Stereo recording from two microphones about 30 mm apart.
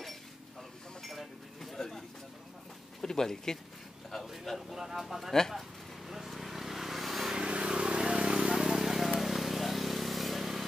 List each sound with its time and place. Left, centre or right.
1.0 s a sound: centre
1.8 s a sound: centre
3.0 s speech: centre
4.6 s speech: centre
5.5 s vehicle: centre
7.3 s vehicle: right
8.5 s vehicle: centre